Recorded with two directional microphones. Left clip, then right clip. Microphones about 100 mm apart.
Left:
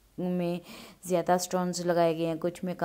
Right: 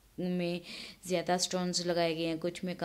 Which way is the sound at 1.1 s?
40° left (ahead or behind).